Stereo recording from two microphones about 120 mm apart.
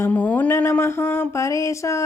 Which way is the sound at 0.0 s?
15° left (ahead or behind).